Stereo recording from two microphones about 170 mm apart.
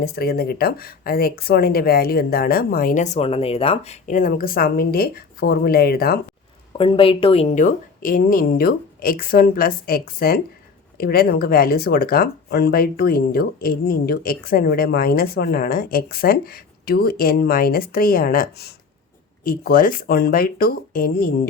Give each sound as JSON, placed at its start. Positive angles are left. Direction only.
{"t": 0.0, "sound": "speech", "side_deg": 65}
{"t": 6.7, "sound": "speech", "side_deg": 30}
{"t": 7.5, "sound": "speech", "side_deg": 50}